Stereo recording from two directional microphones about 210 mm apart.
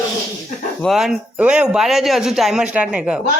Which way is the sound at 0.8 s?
Centre (ahead or behind).